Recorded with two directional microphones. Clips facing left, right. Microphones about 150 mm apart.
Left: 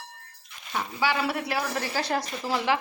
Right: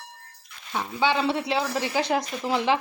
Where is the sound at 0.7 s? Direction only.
20° right (ahead or behind).